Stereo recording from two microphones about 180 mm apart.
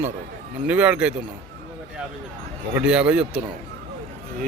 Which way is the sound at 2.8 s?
5° right (ahead or behind).